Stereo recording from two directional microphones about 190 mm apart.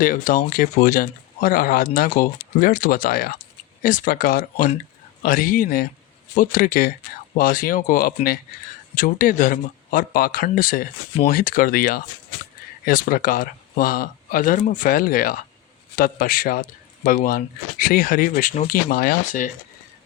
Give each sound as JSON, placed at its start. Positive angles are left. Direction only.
{"t": 0.0, "sound": "speech", "side_deg": 45}